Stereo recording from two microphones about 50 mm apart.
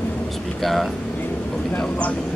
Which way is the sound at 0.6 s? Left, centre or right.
Centre.